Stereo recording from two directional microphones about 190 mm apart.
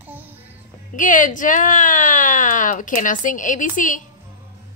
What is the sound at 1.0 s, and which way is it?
A woman's voice, 45° left (ahead or behind).